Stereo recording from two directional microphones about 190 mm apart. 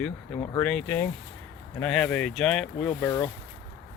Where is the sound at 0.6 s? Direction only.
5° left (ahead or behind).